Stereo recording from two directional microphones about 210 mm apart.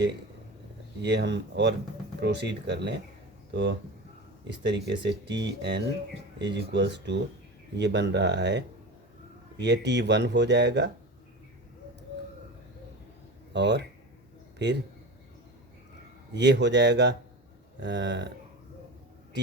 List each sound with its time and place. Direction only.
1.0 s speech: 55° right (ahead or behind)
13.5 s speech: 55° right (ahead or behind)
16.3 s speech: 55° right (ahead or behind)